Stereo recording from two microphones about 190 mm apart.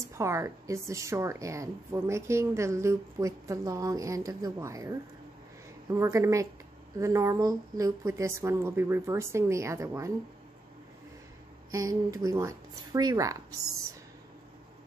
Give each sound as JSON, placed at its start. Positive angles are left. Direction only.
{"t": 0.1, "sound": "a woman's voice", "side_deg": -15}
{"t": 11.7, "sound": "speech", "side_deg": -20}